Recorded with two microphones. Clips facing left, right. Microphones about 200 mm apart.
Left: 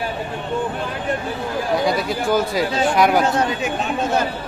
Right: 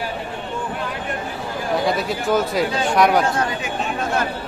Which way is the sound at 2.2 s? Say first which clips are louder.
Even; centre (ahead or behind).